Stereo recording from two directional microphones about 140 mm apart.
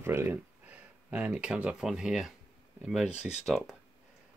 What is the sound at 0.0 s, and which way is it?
Speech, 15° right (ahead or behind).